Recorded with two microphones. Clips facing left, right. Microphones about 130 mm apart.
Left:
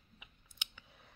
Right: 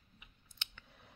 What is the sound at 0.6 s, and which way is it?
Scissors, 10° left (ahead or behind).